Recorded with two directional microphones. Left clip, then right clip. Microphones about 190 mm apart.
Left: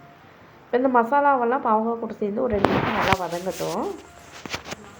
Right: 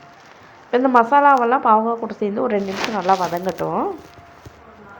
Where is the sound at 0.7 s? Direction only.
15° right (ahead or behind).